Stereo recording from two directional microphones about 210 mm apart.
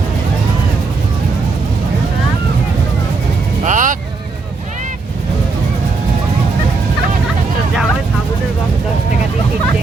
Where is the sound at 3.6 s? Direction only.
35° right (ahead or behind).